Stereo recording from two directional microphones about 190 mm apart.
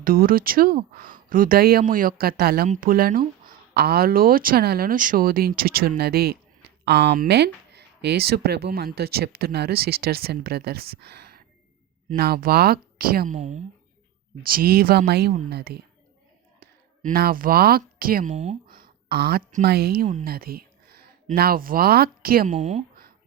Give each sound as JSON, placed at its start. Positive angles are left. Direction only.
{"t": 0.0, "sound": "speech", "side_deg": -50}
{"t": 14.4, "sound": "speech", "side_deg": -50}
{"t": 22.5, "sound": "speech", "side_deg": -35}